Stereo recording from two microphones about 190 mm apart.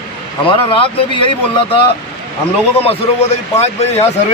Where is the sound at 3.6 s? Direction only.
35° left (ahead or behind).